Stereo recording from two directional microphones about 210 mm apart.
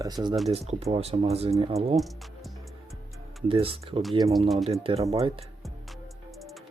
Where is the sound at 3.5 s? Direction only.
25° right (ahead or behind).